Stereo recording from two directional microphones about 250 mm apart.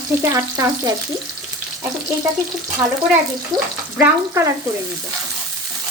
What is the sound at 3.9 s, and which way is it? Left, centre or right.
Speech, centre.